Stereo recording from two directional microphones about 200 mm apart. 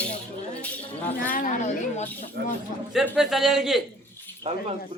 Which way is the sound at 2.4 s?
60° right (ahead or behind).